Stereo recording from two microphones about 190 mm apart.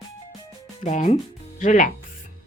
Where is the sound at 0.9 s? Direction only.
40° left (ahead or behind).